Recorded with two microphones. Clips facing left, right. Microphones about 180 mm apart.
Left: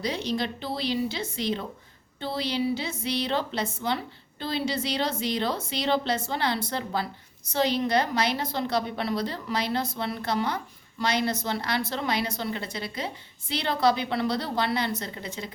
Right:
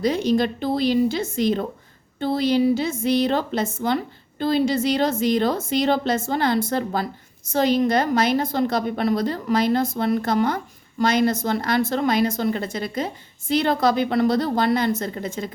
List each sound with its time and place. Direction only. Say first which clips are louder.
0.0 s a woman's voice: right 9 dB; 50° right (ahead or behind)